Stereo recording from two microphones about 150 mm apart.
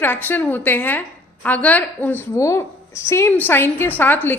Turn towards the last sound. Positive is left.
turn(degrees=15)  # may be behind; listen again after turning